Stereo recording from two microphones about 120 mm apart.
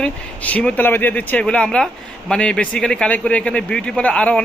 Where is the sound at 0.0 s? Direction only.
10° left (ahead or behind).